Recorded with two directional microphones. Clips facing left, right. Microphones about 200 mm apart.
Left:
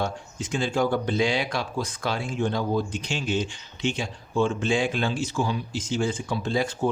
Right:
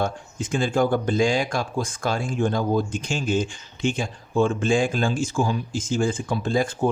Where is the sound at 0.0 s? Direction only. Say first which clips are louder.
Right 3 dB; 55° right (ahead or behind).